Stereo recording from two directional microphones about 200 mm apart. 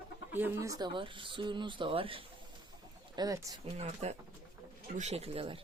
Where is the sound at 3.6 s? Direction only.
30° right (ahead or behind).